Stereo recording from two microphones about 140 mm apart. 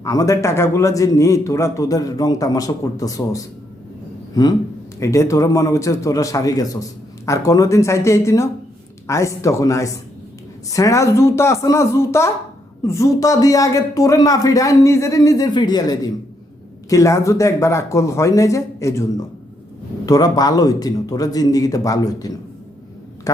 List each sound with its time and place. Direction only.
0.0 s a man's voice: 25° left (ahead or behind)